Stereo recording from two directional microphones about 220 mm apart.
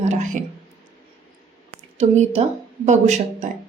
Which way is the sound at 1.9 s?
30° right (ahead or behind).